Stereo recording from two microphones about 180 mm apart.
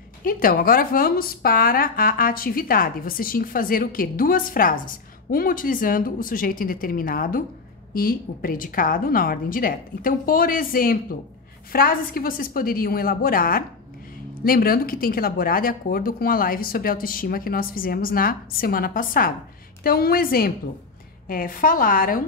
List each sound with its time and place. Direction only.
0.2 s a woman's voice: 50° left (ahead or behind)